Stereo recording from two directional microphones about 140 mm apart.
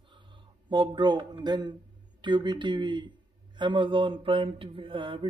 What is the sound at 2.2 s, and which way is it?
Mantra, 35° right (ahead or behind).